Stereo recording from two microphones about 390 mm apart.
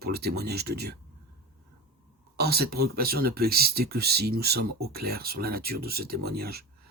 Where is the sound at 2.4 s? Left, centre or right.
Right.